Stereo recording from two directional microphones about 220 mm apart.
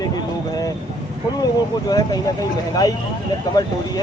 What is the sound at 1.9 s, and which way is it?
Speech, 15° left (ahead or behind).